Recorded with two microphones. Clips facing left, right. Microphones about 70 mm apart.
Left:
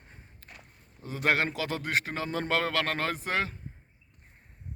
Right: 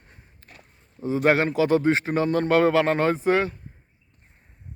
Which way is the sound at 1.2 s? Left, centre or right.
Centre.